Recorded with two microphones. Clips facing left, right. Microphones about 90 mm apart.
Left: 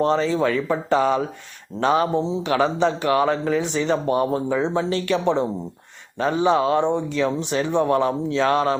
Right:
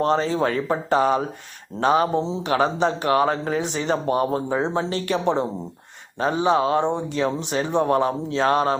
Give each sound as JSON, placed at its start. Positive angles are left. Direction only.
{"t": 0.0, "sound": "a man's voice", "side_deg": -50}
{"t": 6.1, "sound": "a man's voice", "side_deg": -30}